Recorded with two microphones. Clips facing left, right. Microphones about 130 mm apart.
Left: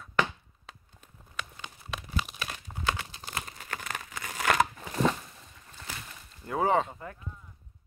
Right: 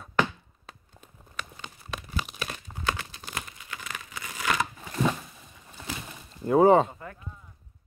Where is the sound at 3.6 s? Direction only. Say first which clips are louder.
Left 2 dB; 45° left (ahead or behind).